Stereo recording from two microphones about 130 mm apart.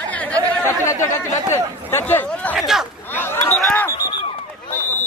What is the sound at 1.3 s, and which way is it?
Speech, 20° left (ahead or behind).